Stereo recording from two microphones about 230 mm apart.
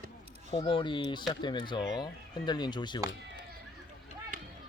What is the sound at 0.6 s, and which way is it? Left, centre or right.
Speech, left.